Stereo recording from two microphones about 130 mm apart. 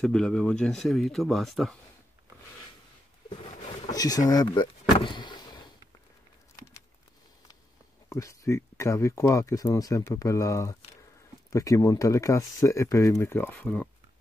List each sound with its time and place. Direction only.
0.0 s speech: 5° left (ahead or behind)
3.9 s speech: 30° left (ahead or behind)
4.9 s vehicle: 40° left (ahead or behind)
8.1 s speech: 25° left (ahead or behind)